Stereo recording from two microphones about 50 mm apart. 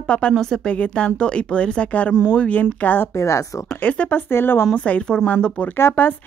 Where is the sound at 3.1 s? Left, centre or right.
Left.